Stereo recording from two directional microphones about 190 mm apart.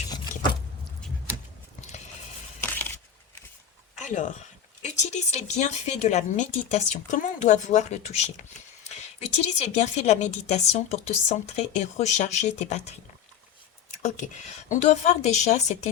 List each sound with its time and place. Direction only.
2.6 s a sound: 10° left (ahead or behind)
4.0 s speech: 40° left (ahead or behind)
14.0 s speech: 40° left (ahead or behind)